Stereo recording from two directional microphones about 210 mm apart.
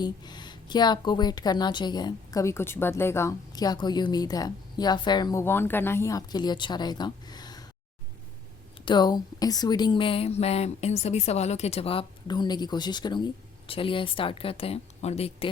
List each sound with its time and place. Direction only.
0.0 s a woman's voice: 20° left (ahead or behind)
8.8 s a woman's voice: 20° left (ahead or behind)